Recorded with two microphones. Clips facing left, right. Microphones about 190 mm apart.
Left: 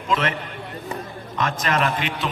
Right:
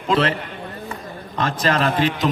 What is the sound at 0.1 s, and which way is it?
Speech, 35° right (ahead or behind).